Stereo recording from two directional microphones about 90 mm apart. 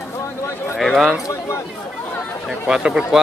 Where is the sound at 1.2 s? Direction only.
35° left (ahead or behind).